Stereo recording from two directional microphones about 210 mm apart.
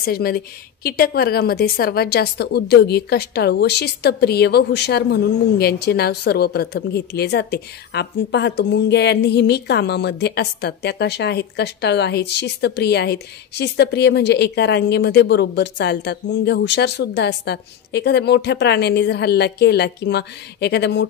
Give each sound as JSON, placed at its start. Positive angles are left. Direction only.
{"t": 0.0, "sound": "a woman's voice", "side_deg": 45}